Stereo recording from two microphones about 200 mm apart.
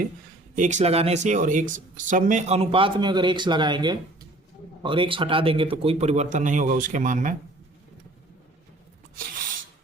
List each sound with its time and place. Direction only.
0.5 s speech: 40° right (ahead or behind)